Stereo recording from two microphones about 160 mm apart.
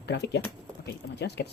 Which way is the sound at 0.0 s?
90° left.